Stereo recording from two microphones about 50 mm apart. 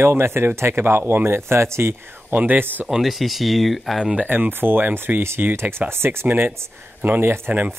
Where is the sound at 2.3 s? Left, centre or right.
Right.